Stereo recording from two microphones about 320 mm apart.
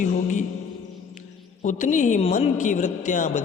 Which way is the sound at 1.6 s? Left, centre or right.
Left.